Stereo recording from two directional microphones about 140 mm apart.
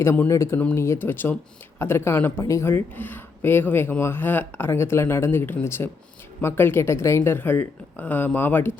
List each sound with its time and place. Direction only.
0.0 s speech: 20° left (ahead or behind)